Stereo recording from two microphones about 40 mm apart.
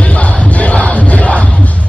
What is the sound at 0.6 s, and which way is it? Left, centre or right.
Crowd, left.